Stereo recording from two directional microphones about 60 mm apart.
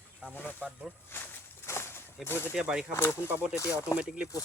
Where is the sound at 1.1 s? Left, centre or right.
Left.